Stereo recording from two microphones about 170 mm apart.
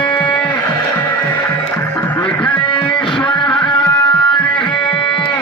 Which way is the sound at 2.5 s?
30° left (ahead or behind).